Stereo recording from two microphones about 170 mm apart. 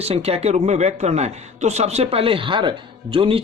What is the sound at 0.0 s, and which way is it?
A man's voice, 35° right (ahead or behind).